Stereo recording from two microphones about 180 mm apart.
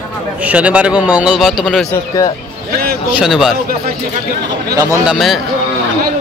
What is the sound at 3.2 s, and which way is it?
Speech, centre (ahead or behind).